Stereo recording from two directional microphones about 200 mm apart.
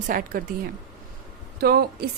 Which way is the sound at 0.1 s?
45° right (ahead or behind).